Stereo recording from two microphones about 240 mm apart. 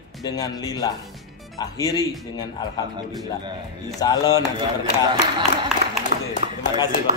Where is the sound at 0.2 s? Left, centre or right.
Centre.